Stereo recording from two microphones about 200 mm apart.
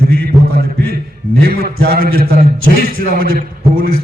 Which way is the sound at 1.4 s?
50° right (ahead or behind).